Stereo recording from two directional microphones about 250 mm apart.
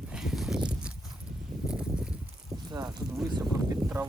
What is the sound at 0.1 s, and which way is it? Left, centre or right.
Horse, centre.